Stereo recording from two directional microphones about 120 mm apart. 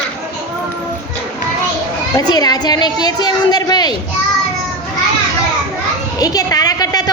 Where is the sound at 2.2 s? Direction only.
35° left (ahead or behind).